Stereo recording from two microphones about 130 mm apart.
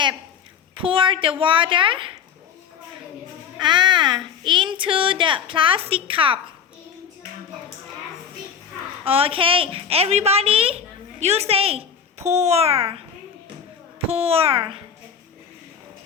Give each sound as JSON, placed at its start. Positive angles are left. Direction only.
{"t": 0.8, "sound": "a child's voice", "side_deg": -40}
{"t": 3.6, "sound": "a child's voice", "side_deg": -35}
{"t": 9.0, "sound": "a child's voice", "side_deg": -45}
{"t": 14.1, "sound": "a child's voice", "side_deg": -50}